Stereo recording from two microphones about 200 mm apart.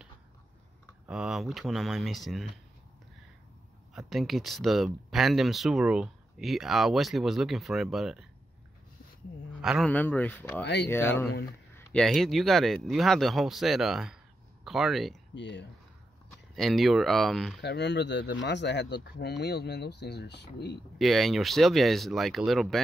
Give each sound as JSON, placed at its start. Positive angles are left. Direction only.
{"t": 1.0, "sound": "speech", "side_deg": -5}
{"t": 3.9, "sound": "speech", "side_deg": 0}
{"t": 9.6, "sound": "a man's voice", "side_deg": -5}
{"t": 9.8, "sound": "speech", "side_deg": 5}
{"t": 15.3, "sound": "speech", "side_deg": 60}
{"t": 16.5, "sound": "speech", "side_deg": 0}
{"t": 17.6, "sound": "speech", "side_deg": 60}
{"t": 21.0, "sound": "speech", "side_deg": 0}